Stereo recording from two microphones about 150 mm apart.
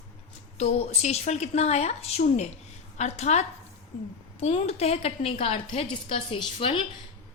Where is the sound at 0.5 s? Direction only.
45° left (ahead or behind).